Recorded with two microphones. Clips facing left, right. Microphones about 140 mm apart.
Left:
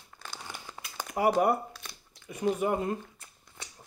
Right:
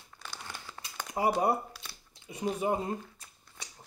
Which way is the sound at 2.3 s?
25° right (ahead or behind).